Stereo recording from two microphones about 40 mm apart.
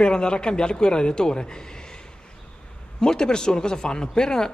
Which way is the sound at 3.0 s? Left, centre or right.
Centre.